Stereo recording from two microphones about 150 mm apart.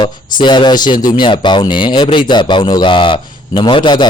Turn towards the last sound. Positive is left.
turn(degrees=30)  # may be behind; listen again after turning